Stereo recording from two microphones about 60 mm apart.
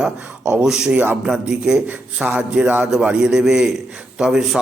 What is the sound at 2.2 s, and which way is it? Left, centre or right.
Music, right.